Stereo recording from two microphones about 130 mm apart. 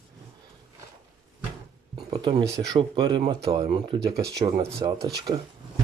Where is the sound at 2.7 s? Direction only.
35° right (ahead or behind).